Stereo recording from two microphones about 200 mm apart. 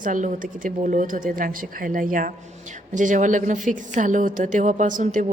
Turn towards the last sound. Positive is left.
turn(degrees=-40)  # may be behind; listen again after turning